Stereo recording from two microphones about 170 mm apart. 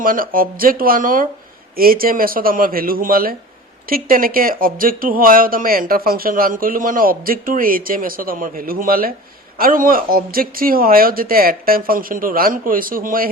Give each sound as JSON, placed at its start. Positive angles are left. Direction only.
{"t": 0.0, "sound": "speech", "side_deg": -55}